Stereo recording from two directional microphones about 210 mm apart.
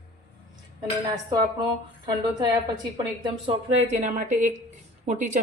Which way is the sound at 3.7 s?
30° right (ahead or behind).